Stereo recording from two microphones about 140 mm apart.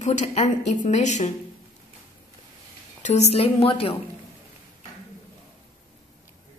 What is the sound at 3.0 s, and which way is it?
Speech, 50° left (ahead or behind).